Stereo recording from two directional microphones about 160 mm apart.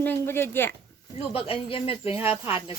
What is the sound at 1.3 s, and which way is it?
Speech, 35° left (ahead or behind).